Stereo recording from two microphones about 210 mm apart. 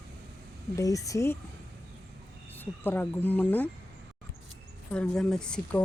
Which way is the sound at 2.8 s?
10° left (ahead or behind).